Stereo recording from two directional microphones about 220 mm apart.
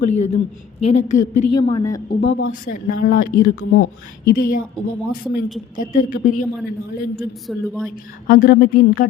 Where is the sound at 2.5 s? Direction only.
35° left (ahead or behind).